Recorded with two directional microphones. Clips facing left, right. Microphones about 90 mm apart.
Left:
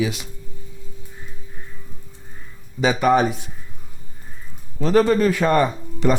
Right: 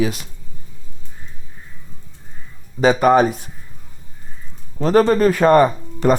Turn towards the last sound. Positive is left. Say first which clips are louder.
# right 4 dB
turn(degrees=-40)  # may be behind; listen again after turning